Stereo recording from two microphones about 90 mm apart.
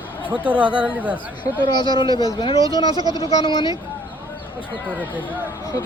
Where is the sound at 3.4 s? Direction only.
65° left (ahead or behind).